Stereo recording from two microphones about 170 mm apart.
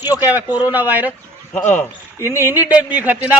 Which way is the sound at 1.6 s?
45° left (ahead or behind).